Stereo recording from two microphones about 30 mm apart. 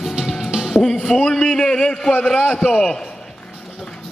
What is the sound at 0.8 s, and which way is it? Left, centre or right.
Speech, left.